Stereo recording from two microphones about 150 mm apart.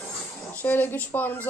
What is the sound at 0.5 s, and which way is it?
Speech, 10° left (ahead or behind).